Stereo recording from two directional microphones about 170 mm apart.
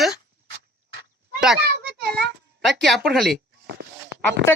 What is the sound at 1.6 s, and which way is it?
Children playing, 80° right.